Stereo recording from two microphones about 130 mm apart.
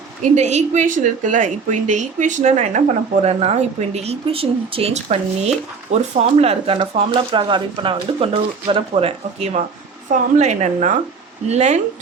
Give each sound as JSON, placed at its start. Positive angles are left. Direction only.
{"t": 0.2, "sound": "a woman's voice", "side_deg": -60}
{"t": 10.1, "sound": "a woman's voice", "side_deg": -65}